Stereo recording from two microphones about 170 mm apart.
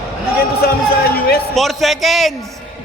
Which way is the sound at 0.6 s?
65° left (ahead or behind).